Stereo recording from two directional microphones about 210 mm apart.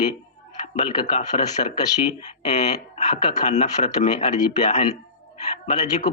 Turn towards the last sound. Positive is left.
turn(degrees=30)  # may be behind; listen again after turning